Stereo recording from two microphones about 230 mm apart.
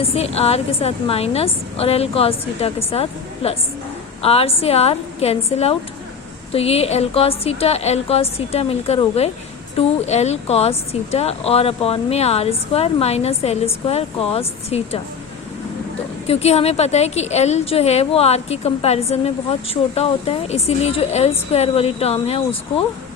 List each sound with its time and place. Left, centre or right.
0.1 s speech: left
16.2 s speech: left